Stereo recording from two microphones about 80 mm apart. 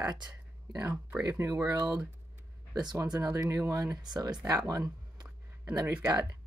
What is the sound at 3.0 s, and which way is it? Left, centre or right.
Speech, right.